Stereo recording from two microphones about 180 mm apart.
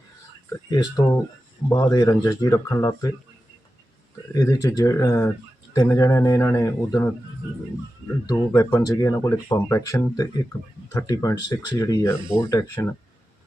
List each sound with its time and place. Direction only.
0.5 s speech: 20° left (ahead or behind)
4.4 s speech: 20° left (ahead or behind)
8.3 s speech: 15° left (ahead or behind)